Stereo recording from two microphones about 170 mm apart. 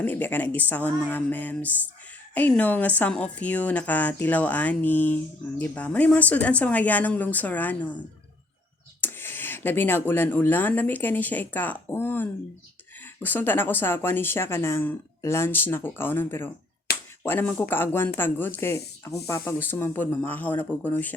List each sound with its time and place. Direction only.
0.0 s speech: 10° left (ahead or behind)
9.0 s speech: 10° left (ahead or behind)
16.9 s a sound: 65° left (ahead or behind)
17.2 s speech: 10° left (ahead or behind)